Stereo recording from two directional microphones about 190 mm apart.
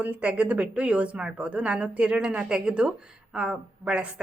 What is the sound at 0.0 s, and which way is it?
A woman's voice, 5° right (ahead or behind).